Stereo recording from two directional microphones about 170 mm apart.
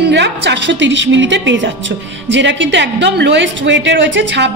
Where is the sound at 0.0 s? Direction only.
90° right.